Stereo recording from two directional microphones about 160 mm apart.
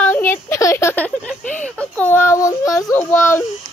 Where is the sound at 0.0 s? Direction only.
15° left (ahead or behind).